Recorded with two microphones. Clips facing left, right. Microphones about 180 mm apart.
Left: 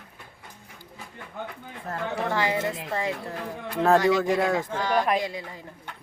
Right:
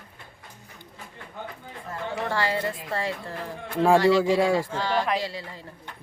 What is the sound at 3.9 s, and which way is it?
A woman's voice, 15° left (ahead or behind).